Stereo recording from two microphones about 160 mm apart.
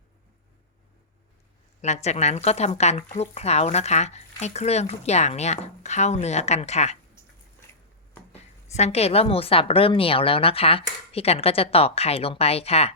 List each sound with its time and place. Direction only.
1.8 s speech: 45° left (ahead or behind)
8.3 s a woman's voice: 45° left (ahead or behind)